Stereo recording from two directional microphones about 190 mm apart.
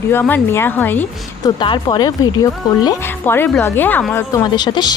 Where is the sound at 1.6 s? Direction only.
25° left (ahead or behind).